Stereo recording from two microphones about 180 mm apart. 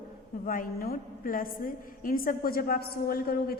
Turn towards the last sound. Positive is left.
turn(degrees=55)  # may be behind; listen again after turning